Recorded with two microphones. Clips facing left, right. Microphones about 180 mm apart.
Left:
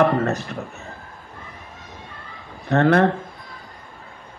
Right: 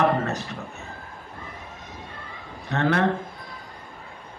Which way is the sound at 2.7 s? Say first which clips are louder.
Left 7 dB; 50° left (ahead or behind).